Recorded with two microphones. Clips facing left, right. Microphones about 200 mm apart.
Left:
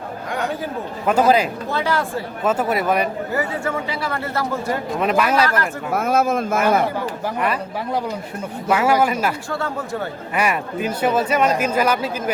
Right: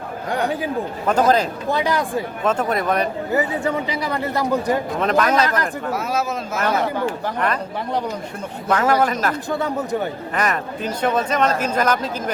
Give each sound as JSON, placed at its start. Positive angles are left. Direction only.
{"t": 0.3, "sound": "chatter", "side_deg": -35}
{"t": 1.0, "sound": "speech", "side_deg": 10}
{"t": 1.7, "sound": "a man's voice", "side_deg": -15}
{"t": 2.4, "sound": "speech", "side_deg": 5}
{"t": 3.3, "sound": "a man's voice", "side_deg": -20}
{"t": 4.9, "sound": "speech", "side_deg": 10}
{"t": 5.9, "sound": "speech", "side_deg": 50}
{"t": 7.3, "sound": "speech", "side_deg": 10}
{"t": 9.5, "sound": "a man's voice", "side_deg": -20}
{"t": 10.3, "sound": "speech", "side_deg": 10}